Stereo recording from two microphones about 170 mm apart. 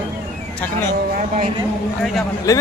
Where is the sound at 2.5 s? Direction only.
20° left (ahead or behind).